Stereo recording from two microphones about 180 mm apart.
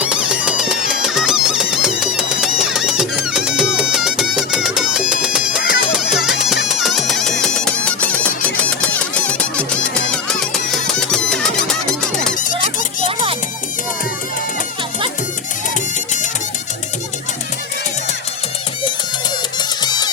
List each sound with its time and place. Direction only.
0.0 s music: 5° right (ahead or behind)
8.8 s a sound: 5° left (ahead or behind)
10.5 s music: centre (ahead or behind)
19.5 s music: 20° left (ahead or behind)